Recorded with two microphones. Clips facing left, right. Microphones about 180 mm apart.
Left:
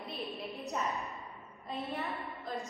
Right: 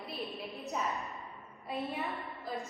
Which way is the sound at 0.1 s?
Centre (ahead or behind).